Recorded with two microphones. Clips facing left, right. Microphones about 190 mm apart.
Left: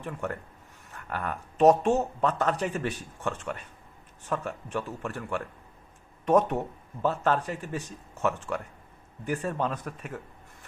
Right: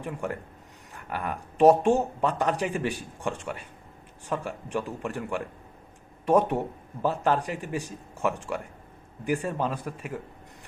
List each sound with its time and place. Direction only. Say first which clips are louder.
0.0 s speech: right 2 dB; 10° right (ahead or behind)